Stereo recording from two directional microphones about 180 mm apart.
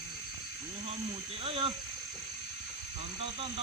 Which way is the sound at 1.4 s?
30° right (ahead or behind).